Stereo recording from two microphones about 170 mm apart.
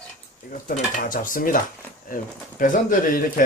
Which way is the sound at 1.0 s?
50° left (ahead or behind).